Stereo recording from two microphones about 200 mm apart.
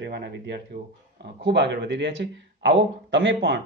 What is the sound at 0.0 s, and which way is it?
Speech, 55° right (ahead or behind).